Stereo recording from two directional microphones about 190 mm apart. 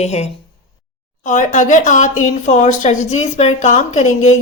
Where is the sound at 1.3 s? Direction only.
40° left (ahead or behind).